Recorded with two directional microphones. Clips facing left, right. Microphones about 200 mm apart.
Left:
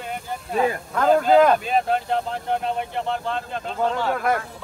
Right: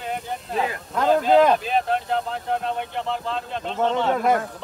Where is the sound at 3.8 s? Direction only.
25° right (ahead or behind).